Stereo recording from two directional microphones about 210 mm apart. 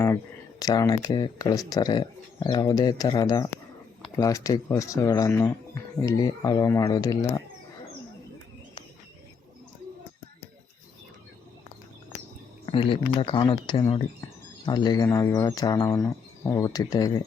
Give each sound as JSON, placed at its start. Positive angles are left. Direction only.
{"t": 0.6, "sound": "speech", "side_deg": 15}
{"t": 12.6, "sound": "speech", "side_deg": 25}